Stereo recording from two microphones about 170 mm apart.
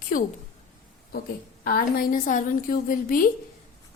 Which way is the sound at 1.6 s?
55° left (ahead or behind).